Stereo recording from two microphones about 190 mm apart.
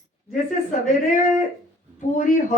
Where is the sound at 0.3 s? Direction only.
45° left (ahead or behind).